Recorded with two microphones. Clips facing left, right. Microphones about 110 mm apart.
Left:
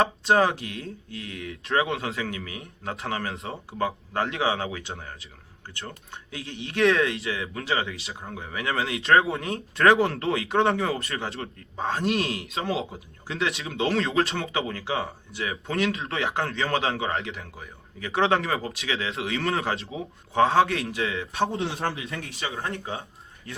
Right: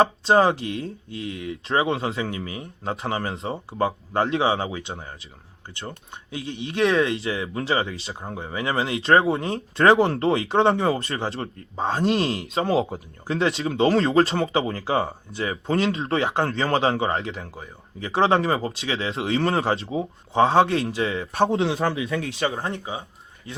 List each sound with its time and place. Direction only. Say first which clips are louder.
0.0 s speech: right 3 dB; 30° right (ahead or behind)
21.3 s a man's voice: right 7 dB; 70° right (ahead or behind)
22.5 s speech: right 2 dB; 25° right (ahead or behind)